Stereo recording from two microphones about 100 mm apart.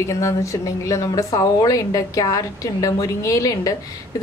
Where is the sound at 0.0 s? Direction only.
30° left (ahead or behind).